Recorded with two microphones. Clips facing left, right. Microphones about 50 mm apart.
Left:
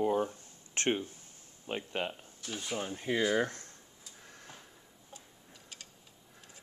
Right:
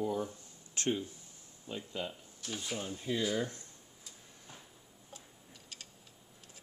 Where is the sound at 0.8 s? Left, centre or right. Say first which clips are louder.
Left 2 dB; left.